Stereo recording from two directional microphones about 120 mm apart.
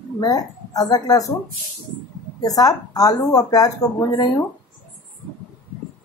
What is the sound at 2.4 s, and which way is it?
Speech, 30° left (ahead or behind).